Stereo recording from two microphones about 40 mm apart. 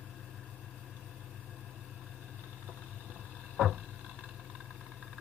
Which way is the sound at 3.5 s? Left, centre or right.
Centre.